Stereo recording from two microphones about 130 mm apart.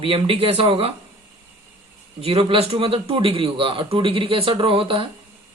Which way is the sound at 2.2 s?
45° right (ahead or behind).